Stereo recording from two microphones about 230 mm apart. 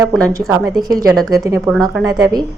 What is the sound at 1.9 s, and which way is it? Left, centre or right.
Speech, centre.